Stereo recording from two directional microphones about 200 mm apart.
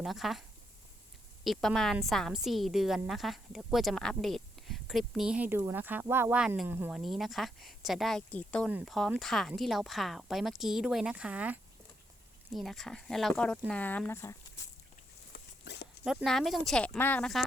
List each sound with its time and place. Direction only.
0.0 s a woman's voice: centre (ahead or behind)
1.5 s a woman's voice: centre (ahead or behind)
15.3 s dog: 55° left (ahead or behind)
16.0 s a woman's voice: centre (ahead or behind)